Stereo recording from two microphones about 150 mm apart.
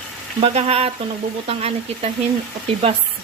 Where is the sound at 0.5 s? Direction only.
40° right (ahead or behind).